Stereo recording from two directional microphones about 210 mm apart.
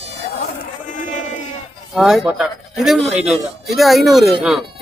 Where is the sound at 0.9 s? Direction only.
35° left (ahead or behind).